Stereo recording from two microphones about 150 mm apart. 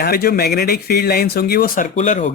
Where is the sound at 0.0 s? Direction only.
90° left.